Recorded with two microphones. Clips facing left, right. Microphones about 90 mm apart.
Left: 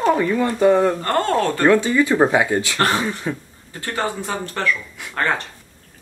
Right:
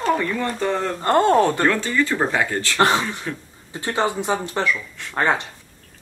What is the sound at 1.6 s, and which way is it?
Speech, 15° left (ahead or behind).